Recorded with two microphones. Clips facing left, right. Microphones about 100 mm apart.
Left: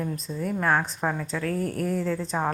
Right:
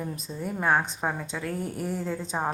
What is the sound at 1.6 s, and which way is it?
Speech, 90° left.